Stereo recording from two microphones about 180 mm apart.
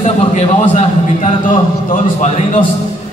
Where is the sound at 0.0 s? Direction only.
40° left (ahead or behind).